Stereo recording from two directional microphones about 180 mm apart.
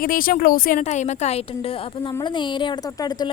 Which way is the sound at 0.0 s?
50° left (ahead or behind).